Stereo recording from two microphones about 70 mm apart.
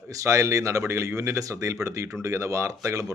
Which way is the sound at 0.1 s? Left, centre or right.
Right.